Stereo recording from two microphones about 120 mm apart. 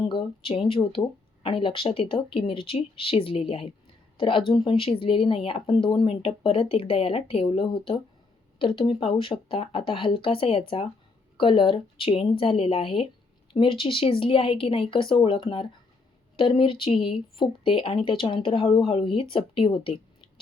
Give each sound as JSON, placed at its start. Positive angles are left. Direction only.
{"t": 0.1, "sound": "speech", "side_deg": 45}